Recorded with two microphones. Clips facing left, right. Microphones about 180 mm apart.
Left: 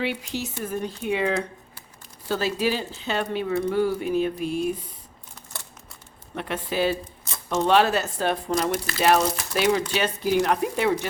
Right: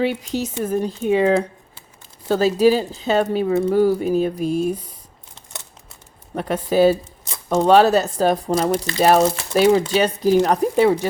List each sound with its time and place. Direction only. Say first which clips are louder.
0.0 s speech: right 7 dB; 40° right (ahead or behind)
2.2 s speech: right 9 dB; 40° right (ahead or behind)
6.3 s speech: right 9 dB; 40° right (ahead or behind)